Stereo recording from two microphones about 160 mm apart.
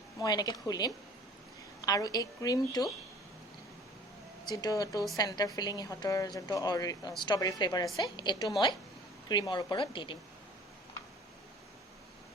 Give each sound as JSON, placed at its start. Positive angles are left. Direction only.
{"t": 0.2, "sound": "speech", "side_deg": 25}
{"t": 4.4, "sound": "speech", "side_deg": 25}